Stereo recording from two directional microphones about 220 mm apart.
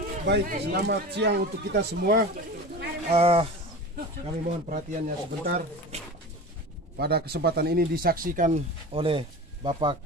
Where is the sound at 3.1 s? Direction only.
25° right (ahead or behind).